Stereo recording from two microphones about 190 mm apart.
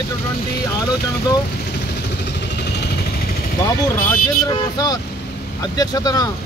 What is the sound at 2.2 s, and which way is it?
Vehicle, 60° left (ahead or behind).